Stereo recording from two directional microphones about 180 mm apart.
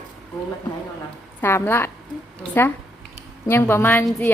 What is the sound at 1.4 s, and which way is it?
A woman's voice, 10° left (ahead or behind).